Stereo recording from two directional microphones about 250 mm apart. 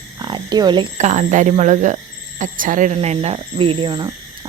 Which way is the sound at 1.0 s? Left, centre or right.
Right.